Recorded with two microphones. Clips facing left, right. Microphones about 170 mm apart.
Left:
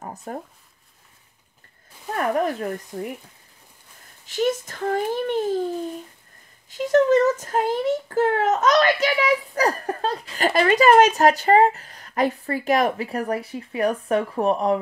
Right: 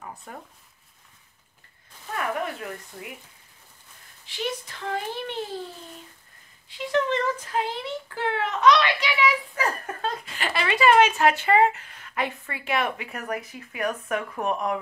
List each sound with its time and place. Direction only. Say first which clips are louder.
0.0 s a sound: left 7 dB; 40° left (ahead or behind)
2.1 s speech: left 7 dB; 40° left (ahead or behind)
4.3 s speech: left 9 dB; 45° left (ahead or behind)
6.7 s speech: left 8 dB; 45° left (ahead or behind)